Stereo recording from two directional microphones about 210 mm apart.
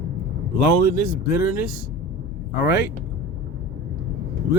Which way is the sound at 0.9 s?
45° left (ahead or behind).